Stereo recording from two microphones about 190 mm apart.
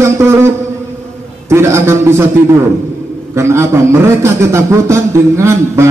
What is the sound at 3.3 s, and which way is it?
A man's voice, 15° right (ahead or behind).